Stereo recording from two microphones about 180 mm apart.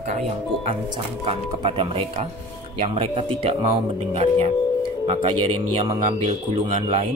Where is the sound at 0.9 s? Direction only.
30° right (ahead or behind).